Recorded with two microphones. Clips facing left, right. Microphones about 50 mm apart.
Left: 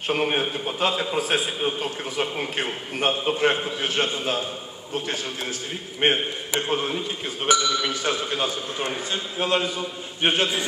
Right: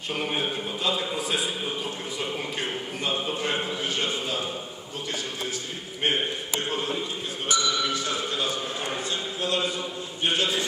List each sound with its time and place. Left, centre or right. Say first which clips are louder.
0.1 s a man's voice: left 5 dB; left
6.0 s a man's voice: left 5 dB; left
7.4 s a man's voice: left 4 dB; left
9.1 s a man's voice: left 5 dB; left